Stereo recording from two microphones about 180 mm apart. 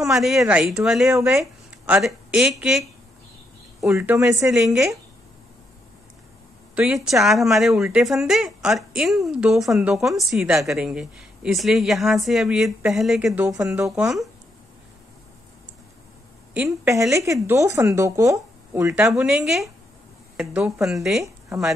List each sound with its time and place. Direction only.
0.0 s a woman's voice: centre (ahead or behind)
4.5 s speech: 5° right (ahead or behind)
6.7 s speech: 5° right (ahead or behind)
16.5 s speech: 10° right (ahead or behind)
19.4 s speech: centre (ahead or behind)